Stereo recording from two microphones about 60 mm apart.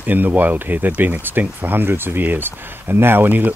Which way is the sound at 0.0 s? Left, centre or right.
Right.